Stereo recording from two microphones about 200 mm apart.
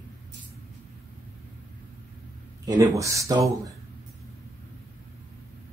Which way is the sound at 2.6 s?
15° right (ahead or behind).